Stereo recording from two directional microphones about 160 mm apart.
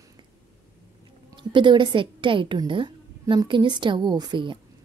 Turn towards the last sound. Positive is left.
turn(degrees=-30)  # may be behind; listen again after turning